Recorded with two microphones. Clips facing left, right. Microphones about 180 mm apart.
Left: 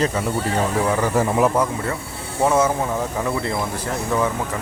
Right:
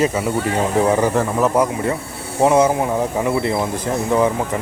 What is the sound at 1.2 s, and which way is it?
Speech, 10° left (ahead or behind).